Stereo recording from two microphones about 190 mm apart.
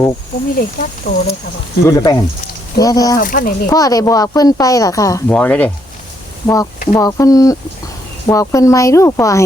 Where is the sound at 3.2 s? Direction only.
45° left (ahead or behind).